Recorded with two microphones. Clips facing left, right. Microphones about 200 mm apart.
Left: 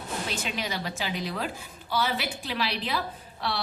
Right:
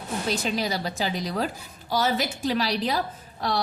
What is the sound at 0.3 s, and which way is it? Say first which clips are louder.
A woman's voice: right 9 dB; 35° right (ahead or behind).